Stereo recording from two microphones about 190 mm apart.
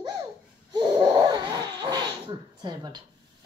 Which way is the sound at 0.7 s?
20° right (ahead or behind).